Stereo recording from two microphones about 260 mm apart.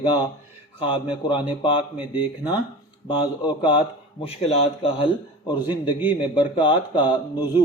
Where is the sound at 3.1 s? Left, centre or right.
Centre.